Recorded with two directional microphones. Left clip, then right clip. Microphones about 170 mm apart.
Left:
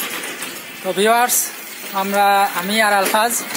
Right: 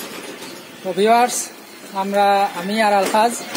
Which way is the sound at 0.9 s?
Centre (ahead or behind).